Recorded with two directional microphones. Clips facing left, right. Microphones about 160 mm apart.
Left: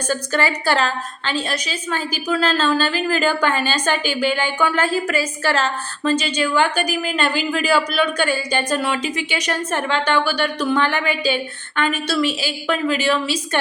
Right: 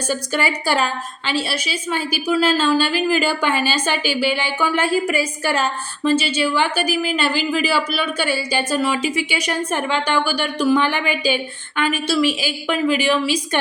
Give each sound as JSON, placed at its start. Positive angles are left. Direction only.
{"t": 0.1, "sound": "a woman's voice", "side_deg": -10}